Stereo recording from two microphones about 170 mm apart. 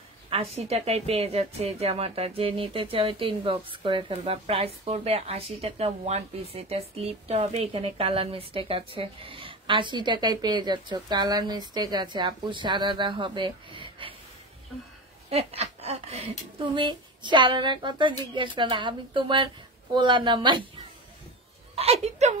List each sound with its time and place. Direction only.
0.3 s a woman's voice: 35° right (ahead or behind)
15.2 s speech: 35° right (ahead or behind)
21.7 s a woman's voice: 40° right (ahead or behind)